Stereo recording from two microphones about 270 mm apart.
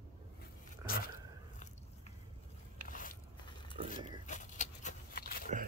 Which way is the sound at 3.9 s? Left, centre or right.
Left.